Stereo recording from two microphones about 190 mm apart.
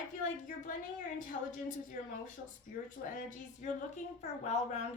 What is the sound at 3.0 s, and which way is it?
A woman's voice, 40° left (ahead or behind).